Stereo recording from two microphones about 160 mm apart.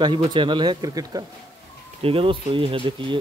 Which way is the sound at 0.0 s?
30° right (ahead or behind).